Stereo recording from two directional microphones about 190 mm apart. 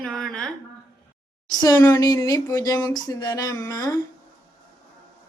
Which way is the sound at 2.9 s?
20° left (ahead or behind).